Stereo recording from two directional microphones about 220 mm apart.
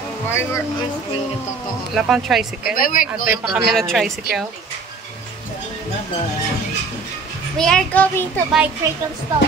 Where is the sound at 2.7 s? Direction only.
40° left (ahead or behind).